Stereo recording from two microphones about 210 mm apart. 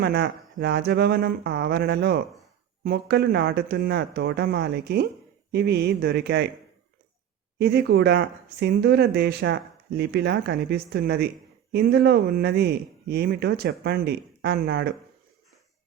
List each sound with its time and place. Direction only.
0.0 s speech: 50° right (ahead or behind)
7.6 s speech: 50° right (ahead or behind)